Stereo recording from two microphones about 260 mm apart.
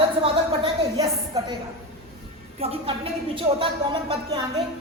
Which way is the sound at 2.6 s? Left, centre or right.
Right.